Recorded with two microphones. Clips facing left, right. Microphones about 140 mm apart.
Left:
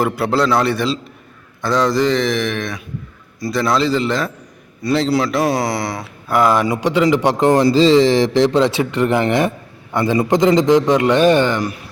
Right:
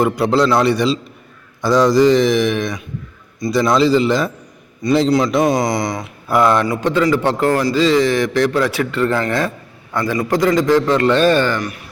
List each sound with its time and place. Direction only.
0.0 s a man's voice: 5° left (ahead or behind)
6.8 s a man's voice: 20° left (ahead or behind)